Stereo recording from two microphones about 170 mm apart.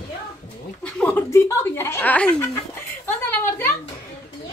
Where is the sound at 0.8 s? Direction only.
5° left (ahead or behind).